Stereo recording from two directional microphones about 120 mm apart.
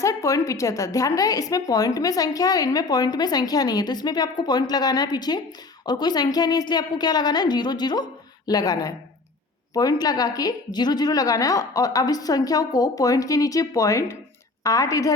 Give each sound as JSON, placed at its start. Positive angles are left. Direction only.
{"t": 0.0, "sound": "a woman's voice", "side_deg": 25}